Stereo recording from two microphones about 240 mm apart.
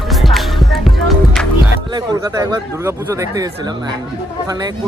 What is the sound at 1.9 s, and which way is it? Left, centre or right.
Speech, centre.